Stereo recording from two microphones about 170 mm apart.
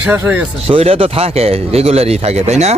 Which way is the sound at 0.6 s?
35° right (ahead or behind).